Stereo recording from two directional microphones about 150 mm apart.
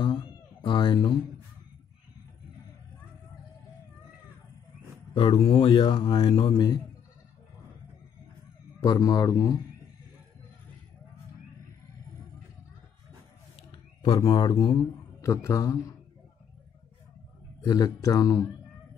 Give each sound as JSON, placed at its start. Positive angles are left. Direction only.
{"t": 0.0, "sound": "cat", "side_deg": 30}
{"t": 5.1, "sound": "a man's voice", "side_deg": 35}
{"t": 8.8, "sound": "speech", "side_deg": 25}
{"t": 14.0, "sound": "speech", "side_deg": 30}
{"t": 15.2, "sound": "speech", "side_deg": 20}
{"t": 17.6, "sound": "speech", "side_deg": 25}